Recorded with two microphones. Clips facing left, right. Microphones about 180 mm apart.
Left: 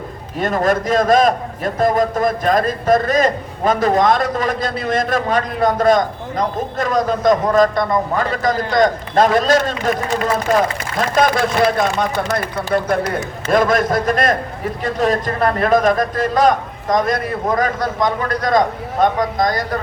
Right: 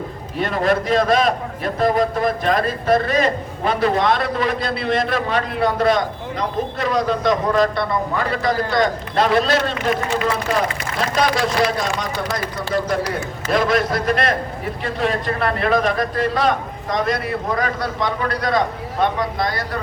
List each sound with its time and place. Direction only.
0.3 s a man's voice: 45° left (ahead or behind)